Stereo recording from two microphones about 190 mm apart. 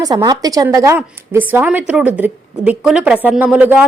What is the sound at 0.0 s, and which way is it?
A woman's voice, 20° right (ahead or behind).